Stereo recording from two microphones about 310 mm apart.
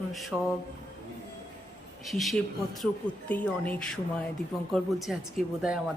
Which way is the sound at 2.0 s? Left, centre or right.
Centre.